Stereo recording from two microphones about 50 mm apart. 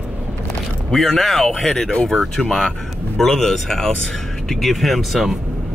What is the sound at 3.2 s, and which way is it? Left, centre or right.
Speech, centre.